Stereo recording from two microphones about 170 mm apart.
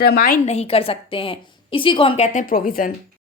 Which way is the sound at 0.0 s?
60° left (ahead or behind).